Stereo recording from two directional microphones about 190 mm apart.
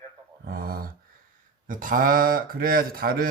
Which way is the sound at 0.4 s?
50° right (ahead or behind).